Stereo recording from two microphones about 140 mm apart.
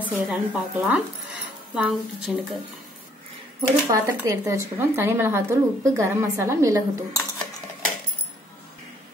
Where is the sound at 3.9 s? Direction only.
20° right (ahead or behind).